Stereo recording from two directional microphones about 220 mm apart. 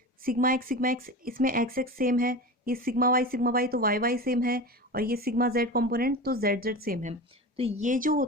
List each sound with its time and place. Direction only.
0.2 s speech: 40° right (ahead or behind)